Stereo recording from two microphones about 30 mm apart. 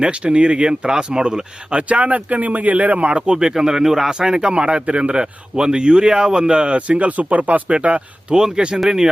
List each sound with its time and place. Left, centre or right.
0.3 s a man's voice: right
0.9 s speech: right
1.9 s speech: right
3.1 s speech: right; by 4.1 s centre
4.1 s a man's voice: right
7.7 s speech: right
8.4 s speech: centre